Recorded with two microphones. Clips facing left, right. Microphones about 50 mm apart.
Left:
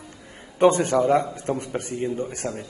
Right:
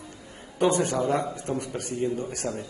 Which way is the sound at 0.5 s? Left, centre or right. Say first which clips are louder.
Left 5 dB; left.